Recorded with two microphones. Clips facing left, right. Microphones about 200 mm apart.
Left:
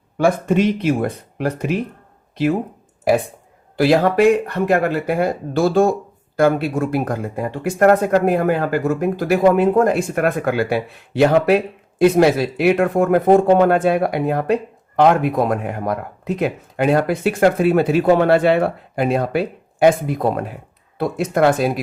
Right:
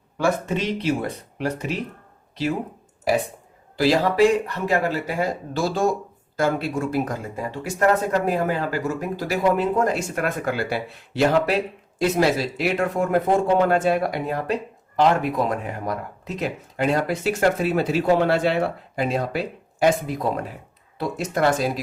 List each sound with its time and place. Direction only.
0.4 s speech: 55° left (ahead or behind)
3.0 s speech: 55° left (ahead or behind)